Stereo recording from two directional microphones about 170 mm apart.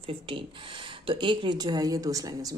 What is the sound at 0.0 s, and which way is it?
Speech, 30° right (ahead or behind).